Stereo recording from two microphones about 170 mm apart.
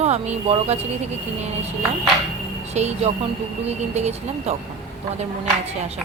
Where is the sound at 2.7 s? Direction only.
40° right (ahead or behind).